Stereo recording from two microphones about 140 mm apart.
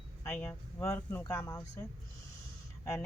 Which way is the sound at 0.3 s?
15° left (ahead or behind).